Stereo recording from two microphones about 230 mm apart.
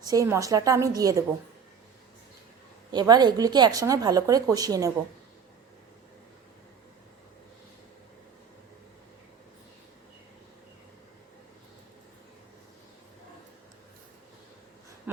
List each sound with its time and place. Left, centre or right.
0.1 s speech: centre
2.9 s speech: centre
15.1 s a sound: centre